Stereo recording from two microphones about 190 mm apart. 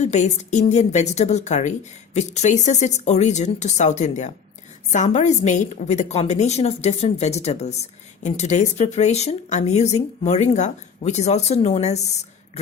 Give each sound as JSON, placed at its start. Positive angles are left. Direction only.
{"t": 0.0, "sound": "a woman's voice", "side_deg": 35}